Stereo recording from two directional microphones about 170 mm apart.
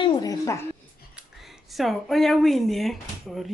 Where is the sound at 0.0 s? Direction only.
25° left (ahead or behind).